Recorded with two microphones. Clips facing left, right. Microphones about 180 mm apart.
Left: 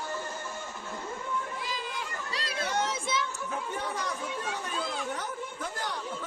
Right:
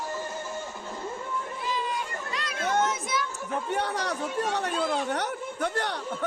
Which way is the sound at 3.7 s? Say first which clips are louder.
Right 8 dB; 70° right (ahead or behind).